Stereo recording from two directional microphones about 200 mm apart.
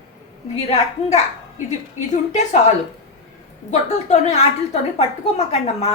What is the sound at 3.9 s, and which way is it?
Speech, 35° left (ahead or behind).